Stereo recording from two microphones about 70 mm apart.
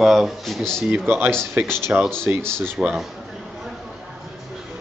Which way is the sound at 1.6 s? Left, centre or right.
Right.